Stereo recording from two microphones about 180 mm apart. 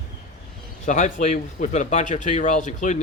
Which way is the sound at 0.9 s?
45° left (ahead or behind).